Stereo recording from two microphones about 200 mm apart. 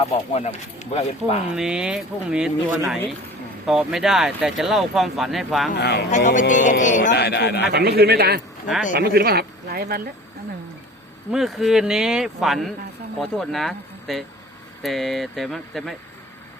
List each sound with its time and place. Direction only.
0.3 s speech: 35° left (ahead or behind)
1.5 s speech: 5° right (ahead or behind)
5.7 s speech: 55° left (ahead or behind)
6.1 s speech: 40° left (ahead or behind)
7.1 s speech: 55° left (ahead or behind)
7.7 s speech: 50° right (ahead or behind)
11.3 s speech: centre (ahead or behind)